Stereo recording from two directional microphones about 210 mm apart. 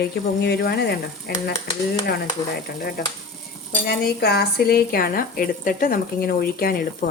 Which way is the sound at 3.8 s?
50° left (ahead or behind).